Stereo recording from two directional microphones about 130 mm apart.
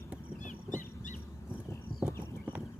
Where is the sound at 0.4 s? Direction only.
75° left (ahead or behind).